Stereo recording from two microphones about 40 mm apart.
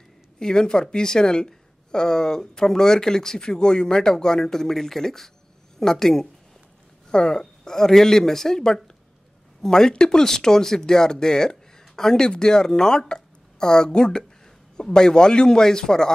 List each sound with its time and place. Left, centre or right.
0.4 s a woman's voice: centre